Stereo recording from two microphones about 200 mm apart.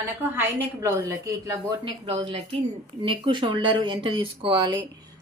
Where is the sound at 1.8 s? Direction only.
25° right (ahead or behind).